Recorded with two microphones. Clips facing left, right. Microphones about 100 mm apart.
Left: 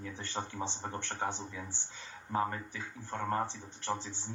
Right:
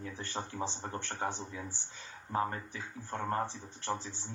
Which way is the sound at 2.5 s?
30° right (ahead or behind).